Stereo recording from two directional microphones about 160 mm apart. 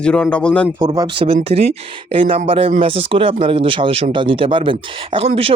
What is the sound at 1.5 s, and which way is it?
Speech, 40° right (ahead or behind).